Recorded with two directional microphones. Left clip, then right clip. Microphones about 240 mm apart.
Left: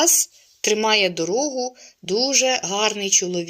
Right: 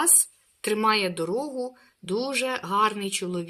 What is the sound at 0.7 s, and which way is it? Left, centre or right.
Speech, centre.